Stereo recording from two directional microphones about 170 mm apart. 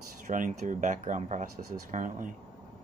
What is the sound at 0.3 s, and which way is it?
Speech, 50° right (ahead or behind).